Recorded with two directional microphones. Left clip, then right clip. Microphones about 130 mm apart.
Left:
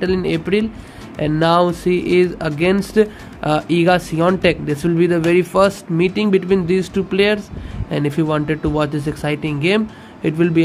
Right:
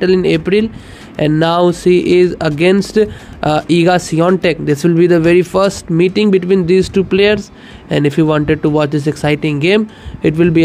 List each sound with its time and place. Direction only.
0.0 s speech: 40° right (ahead or behind)